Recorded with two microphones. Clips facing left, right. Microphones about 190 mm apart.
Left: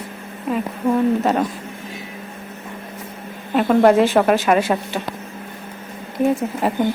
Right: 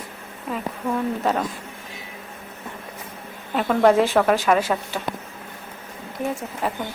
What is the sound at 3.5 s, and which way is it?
Speech, 15° left (ahead or behind).